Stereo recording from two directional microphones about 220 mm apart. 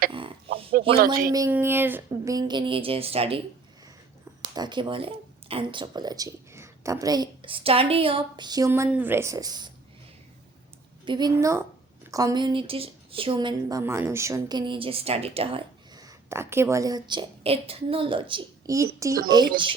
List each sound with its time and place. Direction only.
0.8 s speech: 40° right (ahead or behind)
1.3 s a woman's voice: 10° right (ahead or behind)
4.5 s a woman's voice: 20° right (ahead or behind)
11.0 s a woman's voice: 20° right (ahead or behind)